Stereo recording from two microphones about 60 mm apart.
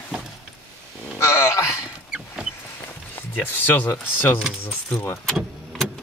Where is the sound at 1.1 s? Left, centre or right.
Left.